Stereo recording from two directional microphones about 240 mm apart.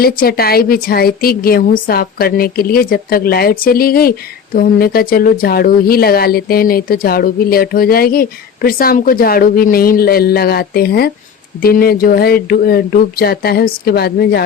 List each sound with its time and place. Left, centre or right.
0.0 s speech: left